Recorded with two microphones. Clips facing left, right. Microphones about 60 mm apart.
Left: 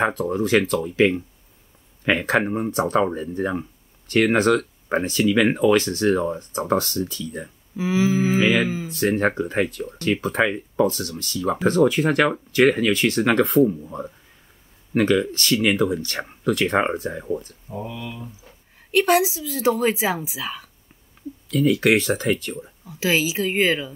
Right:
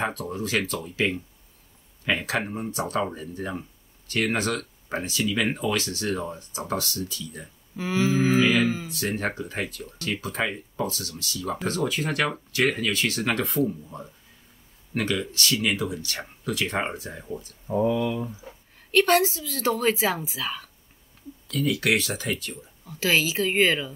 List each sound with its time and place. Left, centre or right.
0.0 s speech: left
4.3 s speech: left
7.7 s a woman's voice: centre
8.8 s speech: left
15.0 s speech: left
17.7 s speech: right
18.8 s a woman's voice: centre
21.5 s speech: left
22.8 s a woman's voice: centre